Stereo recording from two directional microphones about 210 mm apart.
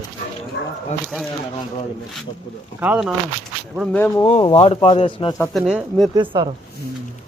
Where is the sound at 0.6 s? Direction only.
50° left (ahead or behind).